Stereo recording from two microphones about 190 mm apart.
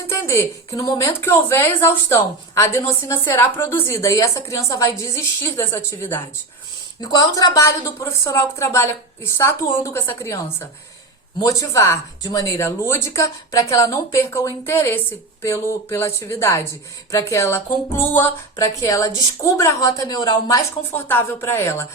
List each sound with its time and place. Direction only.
0.1 s a woman's voice: 15° left (ahead or behind)